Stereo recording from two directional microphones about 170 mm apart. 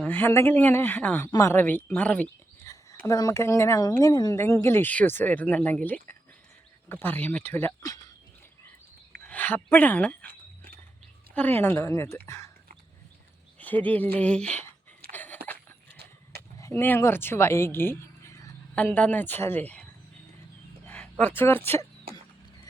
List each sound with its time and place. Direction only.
0.0 s speech: 10° left (ahead or behind)
2.6 s speech: 20° left (ahead or behind)
9.2 s speech: 10° left (ahead or behind)
11.3 s speech: 10° left (ahead or behind)
13.6 s speech: 10° left (ahead or behind)
15.1 s a sound: 10° left (ahead or behind)
16.6 s speech: 15° left (ahead or behind)